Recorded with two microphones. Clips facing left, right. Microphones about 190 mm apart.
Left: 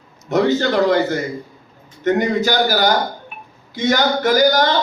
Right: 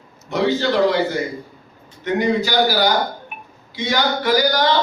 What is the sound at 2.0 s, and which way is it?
Speech, 50° left (ahead or behind).